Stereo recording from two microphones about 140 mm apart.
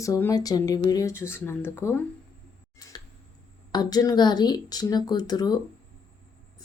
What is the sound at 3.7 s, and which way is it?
Speech, 30° left (ahead or behind).